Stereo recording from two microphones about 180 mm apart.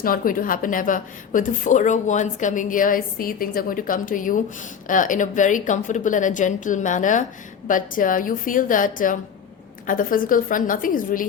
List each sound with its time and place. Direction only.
0.0 s speech: 50° left (ahead or behind)